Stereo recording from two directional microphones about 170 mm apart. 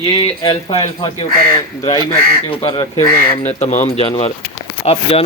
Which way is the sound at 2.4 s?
35° left (ahead or behind).